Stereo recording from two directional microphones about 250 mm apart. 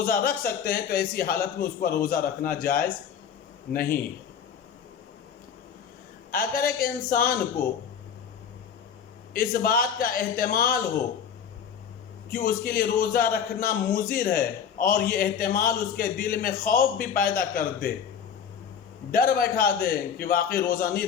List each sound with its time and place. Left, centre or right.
0.0 s a man's voice: left
6.3 s a man's voice: left
9.3 s a man's voice: left
12.3 s a man's voice: left
19.1 s a man's voice: left